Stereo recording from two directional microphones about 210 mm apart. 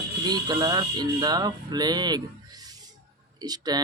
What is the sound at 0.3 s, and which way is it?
Speech, 20° right (ahead or behind).